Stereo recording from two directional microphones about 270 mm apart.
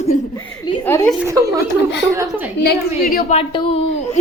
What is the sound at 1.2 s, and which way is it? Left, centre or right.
A woman's voice, centre.